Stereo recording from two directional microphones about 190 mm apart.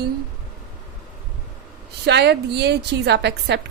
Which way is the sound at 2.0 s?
60° right (ahead or behind).